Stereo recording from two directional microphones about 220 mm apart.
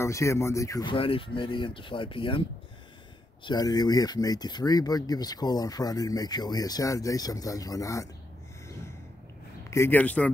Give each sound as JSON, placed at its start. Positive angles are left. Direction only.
{"t": 0.0, "sound": "speech", "side_deg": 15}
{"t": 3.4, "sound": "speech", "side_deg": 20}
{"t": 9.7, "sound": "speech", "side_deg": 10}